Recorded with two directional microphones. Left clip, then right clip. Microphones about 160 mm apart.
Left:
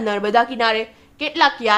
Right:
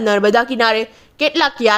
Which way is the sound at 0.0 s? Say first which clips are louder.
Right 4 dB; 30° right (ahead or behind).